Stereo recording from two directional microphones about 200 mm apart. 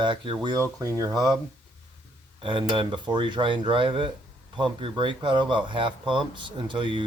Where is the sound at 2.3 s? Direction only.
25° right (ahead or behind).